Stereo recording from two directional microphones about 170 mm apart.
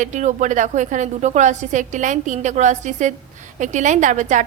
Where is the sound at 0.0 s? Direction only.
45° right (ahead or behind).